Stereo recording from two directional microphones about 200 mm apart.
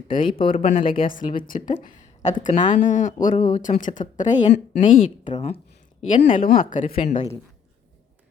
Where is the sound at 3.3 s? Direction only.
25° left (ahead or behind).